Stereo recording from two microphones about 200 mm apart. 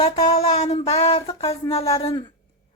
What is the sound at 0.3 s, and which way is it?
Speech, 35° left (ahead or behind).